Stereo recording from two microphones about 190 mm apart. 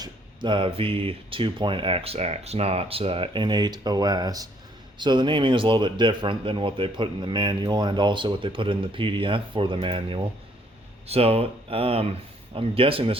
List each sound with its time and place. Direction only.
0.0 s speech: 25° right (ahead or behind)